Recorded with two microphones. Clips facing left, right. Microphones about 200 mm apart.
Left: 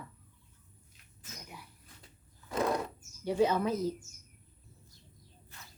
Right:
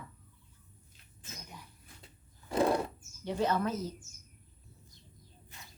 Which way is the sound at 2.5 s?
30° right (ahead or behind).